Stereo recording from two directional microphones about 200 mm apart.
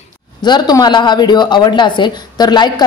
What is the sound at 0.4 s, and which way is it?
A woman's voice, 20° left (ahead or behind).